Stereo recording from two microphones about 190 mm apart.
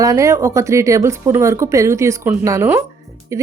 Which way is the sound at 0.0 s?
15° right (ahead or behind).